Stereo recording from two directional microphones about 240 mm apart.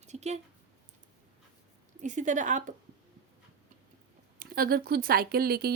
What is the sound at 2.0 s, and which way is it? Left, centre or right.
Speech, right.